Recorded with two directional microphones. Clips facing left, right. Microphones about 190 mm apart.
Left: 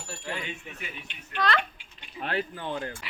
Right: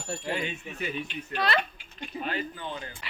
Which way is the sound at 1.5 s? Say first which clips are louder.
Right 1 dB; 45° right (ahead or behind).